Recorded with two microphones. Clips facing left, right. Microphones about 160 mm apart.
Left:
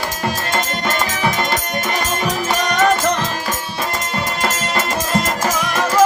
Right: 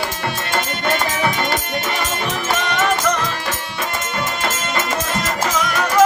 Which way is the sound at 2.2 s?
35° left (ahead or behind).